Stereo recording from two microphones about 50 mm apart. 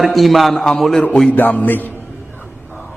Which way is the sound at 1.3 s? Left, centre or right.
Left.